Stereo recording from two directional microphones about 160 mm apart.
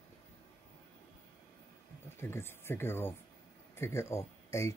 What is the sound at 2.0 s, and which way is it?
Speech, 15° left (ahead or behind).